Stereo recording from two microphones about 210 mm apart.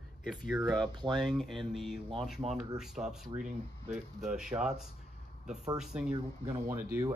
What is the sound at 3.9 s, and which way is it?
Speech, 5° right (ahead or behind).